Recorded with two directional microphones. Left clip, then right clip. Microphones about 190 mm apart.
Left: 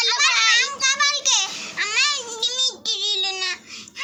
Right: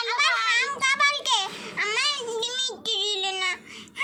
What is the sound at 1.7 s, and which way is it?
Child singing, 35° right (ahead or behind).